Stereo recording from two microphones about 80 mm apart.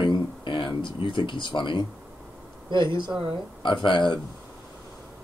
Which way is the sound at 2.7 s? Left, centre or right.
Right.